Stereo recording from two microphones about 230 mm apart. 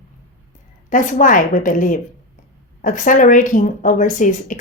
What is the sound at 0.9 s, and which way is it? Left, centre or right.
Speech, left.